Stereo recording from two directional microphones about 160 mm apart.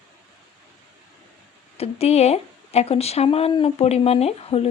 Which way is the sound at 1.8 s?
40° left (ahead or behind).